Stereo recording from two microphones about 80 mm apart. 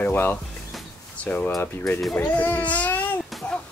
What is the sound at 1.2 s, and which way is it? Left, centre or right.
Speech, centre.